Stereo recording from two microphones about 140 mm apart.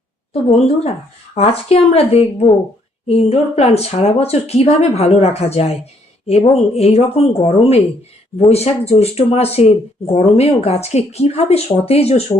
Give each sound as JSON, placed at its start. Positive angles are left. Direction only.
{"t": 0.5, "sound": "speech", "side_deg": 50}